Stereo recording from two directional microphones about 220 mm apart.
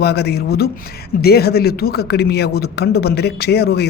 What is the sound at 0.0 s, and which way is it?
A man's voice, 45° left (ahead or behind).